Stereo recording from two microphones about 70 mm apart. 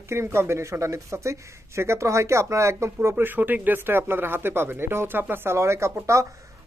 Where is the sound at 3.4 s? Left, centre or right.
Right.